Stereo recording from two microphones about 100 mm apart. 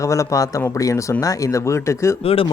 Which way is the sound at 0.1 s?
30° left (ahead or behind).